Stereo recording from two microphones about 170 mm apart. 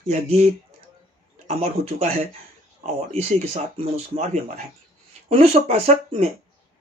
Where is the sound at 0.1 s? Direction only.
45° right (ahead or behind).